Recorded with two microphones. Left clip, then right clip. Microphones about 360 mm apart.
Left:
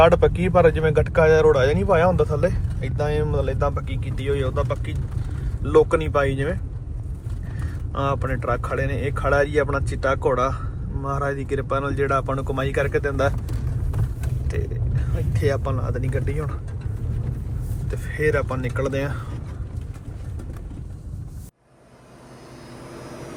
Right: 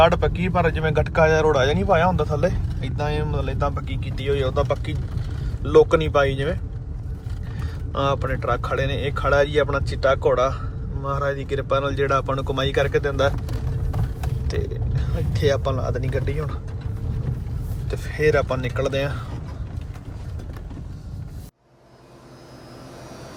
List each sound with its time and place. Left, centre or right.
0.0 s speech: centre
7.9 s speech: centre
14.6 s speech: centre
17.9 s speech: centre